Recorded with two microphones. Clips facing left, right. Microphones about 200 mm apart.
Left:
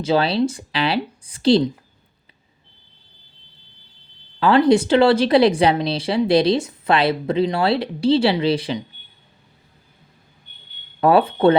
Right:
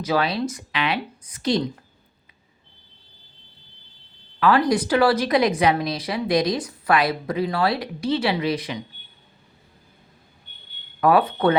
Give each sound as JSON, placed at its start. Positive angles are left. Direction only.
{"t": 0.0, "sound": "speech", "side_deg": 30}
{"t": 4.4, "sound": "a woman's voice", "side_deg": 30}
{"t": 11.0, "sound": "a woman's voice", "side_deg": 30}